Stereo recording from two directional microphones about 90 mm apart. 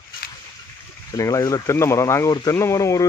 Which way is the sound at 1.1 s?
40° left (ahead or behind).